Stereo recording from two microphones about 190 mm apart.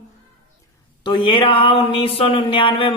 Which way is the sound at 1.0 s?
25° left (ahead or behind).